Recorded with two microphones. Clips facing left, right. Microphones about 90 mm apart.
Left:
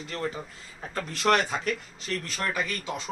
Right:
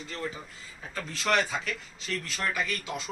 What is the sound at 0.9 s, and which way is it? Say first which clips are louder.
Speech: left 3 dB; 55° left (ahead or behind).